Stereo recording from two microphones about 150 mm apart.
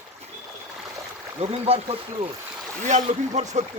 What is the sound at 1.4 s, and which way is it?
Speech, 40° right (ahead or behind).